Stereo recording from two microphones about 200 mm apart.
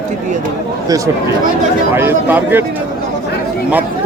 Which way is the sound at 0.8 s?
15° right (ahead or behind).